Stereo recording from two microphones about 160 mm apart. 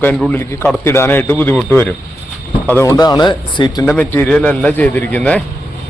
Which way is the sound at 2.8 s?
20° left (ahead or behind).